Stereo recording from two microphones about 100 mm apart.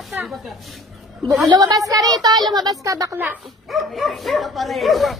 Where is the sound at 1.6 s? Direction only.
40° right (ahead or behind).